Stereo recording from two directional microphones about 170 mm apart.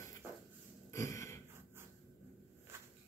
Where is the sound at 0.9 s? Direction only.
15° left (ahead or behind).